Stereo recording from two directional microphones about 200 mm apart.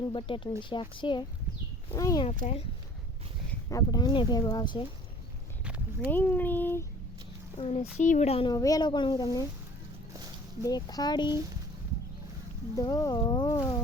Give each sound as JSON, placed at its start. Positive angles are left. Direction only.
{"t": 0.0, "sound": "speech", "side_deg": 25}
{"t": 2.4, "sound": "speech", "side_deg": 30}
{"t": 3.5, "sound": "speech", "side_deg": 15}
{"t": 5.6, "sound": "a sound", "side_deg": -5}
{"t": 6.1, "sound": "speech", "side_deg": 10}
{"t": 7.6, "sound": "speech", "side_deg": 30}
{"t": 8.5, "sound": "speech", "side_deg": 15}
{"t": 10.6, "sound": "speech", "side_deg": 20}
{"t": 12.7, "sound": "speech", "side_deg": 15}